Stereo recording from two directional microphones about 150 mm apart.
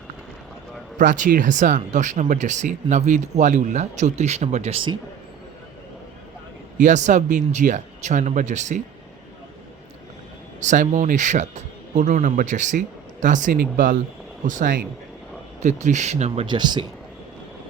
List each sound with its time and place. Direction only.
0.9 s speech: 60° right (ahead or behind); by 4.9 s 40° right (ahead or behind)
6.7 s speech: 55° right (ahead or behind)
10.6 s speech: 55° right (ahead or behind)
15.6 s speech: 50° right (ahead or behind)
16.6 s speech: 30° right (ahead or behind)